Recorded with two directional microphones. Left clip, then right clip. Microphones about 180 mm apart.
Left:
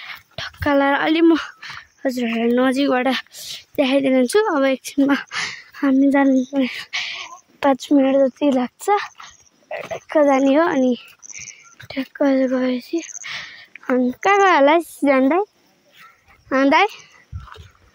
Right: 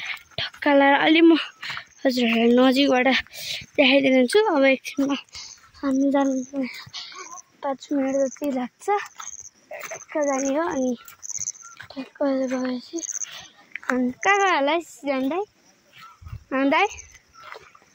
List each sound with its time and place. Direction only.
0.0 s dog: 15° left (ahead or behind)
2.0 s speech: 5° left (ahead or behind)
2.7 s speech: 15° left (ahead or behind)
5.0 s speech: 50° left (ahead or behind)
6.3 s speech: 70° left (ahead or behind)
11.9 s speech: 65° left (ahead or behind)
16.4 s speech: 45° left (ahead or behind)